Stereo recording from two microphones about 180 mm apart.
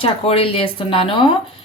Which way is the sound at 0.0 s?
30° left (ahead or behind).